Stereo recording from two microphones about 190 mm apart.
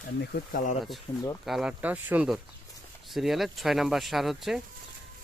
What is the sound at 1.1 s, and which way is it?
Speech, 25° left (ahead or behind).